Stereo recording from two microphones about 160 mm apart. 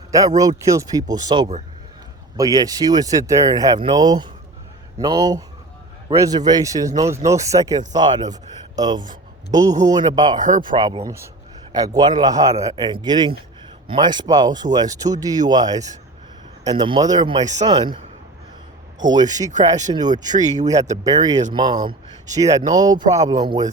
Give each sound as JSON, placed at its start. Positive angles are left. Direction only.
{"t": 0.1, "sound": "speech", "side_deg": -20}
{"t": 11.0, "sound": "speech", "side_deg": -15}
{"t": 19.0, "sound": "speech", "side_deg": -25}
{"t": 20.4, "sound": "speech", "side_deg": -45}
{"t": 21.0, "sound": "speech", "side_deg": -25}